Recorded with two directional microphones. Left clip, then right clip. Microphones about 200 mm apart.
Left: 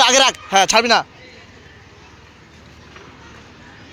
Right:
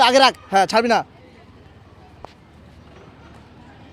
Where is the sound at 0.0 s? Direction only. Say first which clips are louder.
Even; 25° right (ahead or behind).